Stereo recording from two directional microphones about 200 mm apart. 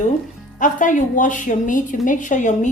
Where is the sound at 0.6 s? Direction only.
40° left (ahead or behind).